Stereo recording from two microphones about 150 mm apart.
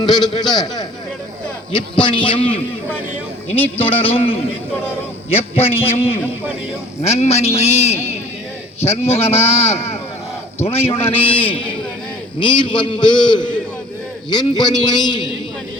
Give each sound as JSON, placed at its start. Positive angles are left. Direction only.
{"t": 0.0, "sound": "a man's voice", "side_deg": 25}
{"t": 3.8, "sound": "a man's voice", "side_deg": 40}